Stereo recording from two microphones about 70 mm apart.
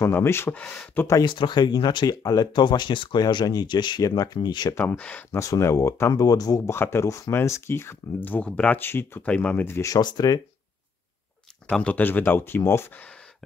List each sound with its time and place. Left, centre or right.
0.0 s speech: left
0.5 s speech: centre
1.2 s speech: left
4.9 s speech: centre
5.3 s speech: left
6.1 s speech: left
6.6 s speech: left
7.1 s speech: left
8.2 s speech: left
8.5 s speech: centre
8.7 s speech: left
9.2 s speech: centre
9.8 s speech: left
11.8 s speech: left